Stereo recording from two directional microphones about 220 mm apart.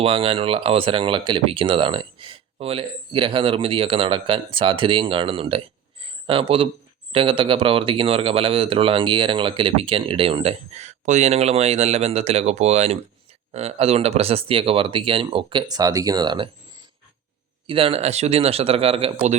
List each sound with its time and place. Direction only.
0.0 s speech: 25° right (ahead or behind)
17.7 s speech: 25° right (ahead or behind)